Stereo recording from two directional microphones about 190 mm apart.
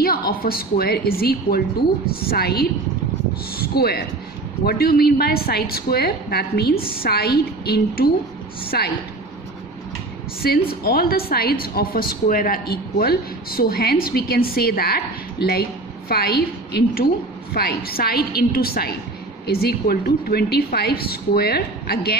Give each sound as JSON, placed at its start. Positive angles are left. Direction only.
{"t": 0.0, "sound": "a woman's voice", "side_deg": 50}
{"t": 10.4, "sound": "a woman's voice", "side_deg": 55}